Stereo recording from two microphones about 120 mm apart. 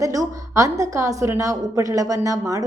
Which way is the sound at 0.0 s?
30° right (ahead or behind).